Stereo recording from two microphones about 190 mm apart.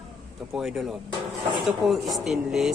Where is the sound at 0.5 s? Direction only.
Centre (ahead or behind).